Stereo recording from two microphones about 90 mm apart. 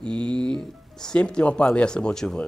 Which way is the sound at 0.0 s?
60° right (ahead or behind).